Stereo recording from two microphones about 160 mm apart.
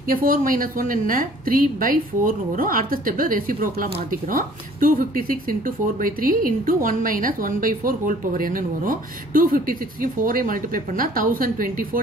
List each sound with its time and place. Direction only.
0.1 s a woman's voice: 60° right (ahead or behind)